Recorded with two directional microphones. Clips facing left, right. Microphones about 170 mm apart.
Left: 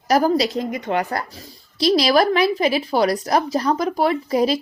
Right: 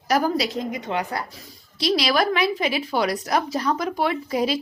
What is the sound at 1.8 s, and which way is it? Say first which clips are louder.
A woman's voice: left 5 dB; 35° left (ahead or behind).